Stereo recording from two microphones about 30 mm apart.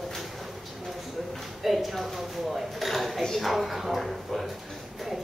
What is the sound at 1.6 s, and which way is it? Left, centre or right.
A woman's voice, centre.